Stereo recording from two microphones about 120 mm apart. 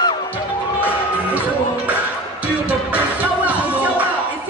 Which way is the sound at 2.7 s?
10° right (ahead or behind).